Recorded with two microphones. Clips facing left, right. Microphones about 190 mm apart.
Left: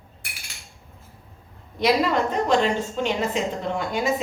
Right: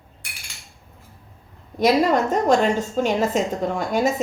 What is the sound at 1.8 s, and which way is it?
A woman's voice, 45° right (ahead or behind).